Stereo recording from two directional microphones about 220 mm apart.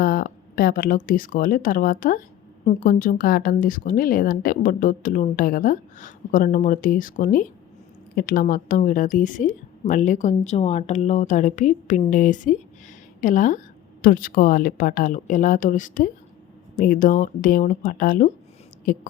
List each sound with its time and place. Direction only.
0.0 s speech: 40° left (ahead or behind)